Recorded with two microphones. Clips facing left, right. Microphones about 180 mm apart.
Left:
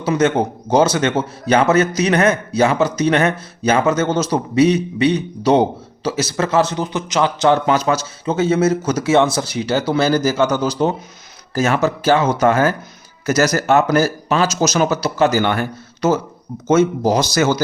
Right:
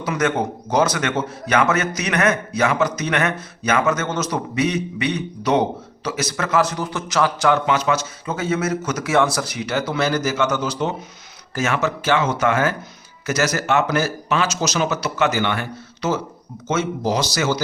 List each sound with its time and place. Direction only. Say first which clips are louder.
0.0 s speech: left 5 dB; 30° left (ahead or behind)
7.7 s a man's voice: left 3 dB; 40° left (ahead or behind)